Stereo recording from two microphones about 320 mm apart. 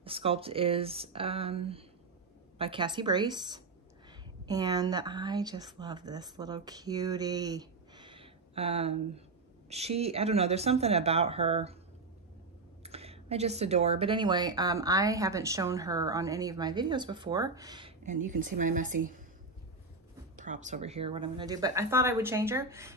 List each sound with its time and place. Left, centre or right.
0.0 s a woman's voice: centre
12.8 s speech: centre
20.3 s speech: right